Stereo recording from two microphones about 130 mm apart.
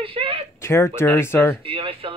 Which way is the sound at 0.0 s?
45° right (ahead or behind).